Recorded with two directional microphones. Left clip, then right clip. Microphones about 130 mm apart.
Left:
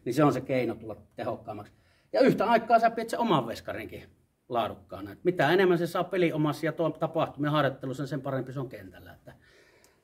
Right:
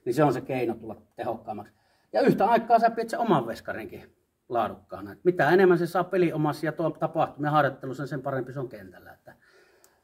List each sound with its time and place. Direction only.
0.0 s a man's voice: 20° left (ahead or behind)